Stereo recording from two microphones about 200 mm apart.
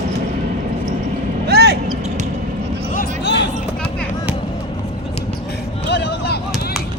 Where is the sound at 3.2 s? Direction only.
60° left (ahead or behind).